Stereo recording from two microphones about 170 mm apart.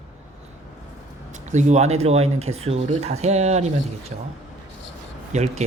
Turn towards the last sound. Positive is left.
turn(degrees=-40)  # may be behind; listen again after turning